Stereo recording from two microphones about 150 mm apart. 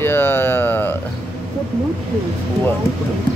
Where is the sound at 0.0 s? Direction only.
15° left (ahead or behind).